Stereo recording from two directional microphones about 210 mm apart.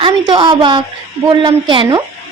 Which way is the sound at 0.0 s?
20° right (ahead or behind).